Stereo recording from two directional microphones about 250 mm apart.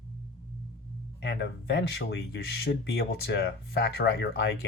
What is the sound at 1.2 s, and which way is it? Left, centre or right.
Speech, left.